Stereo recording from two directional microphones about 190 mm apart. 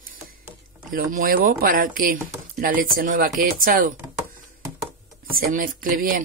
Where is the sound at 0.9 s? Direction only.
45° right (ahead or behind).